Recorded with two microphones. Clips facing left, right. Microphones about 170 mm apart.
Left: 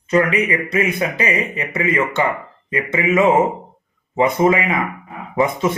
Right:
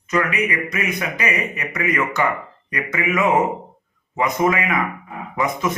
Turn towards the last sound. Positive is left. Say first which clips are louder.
# left 4 dB
turn(degrees=30)  # may be behind; listen again after turning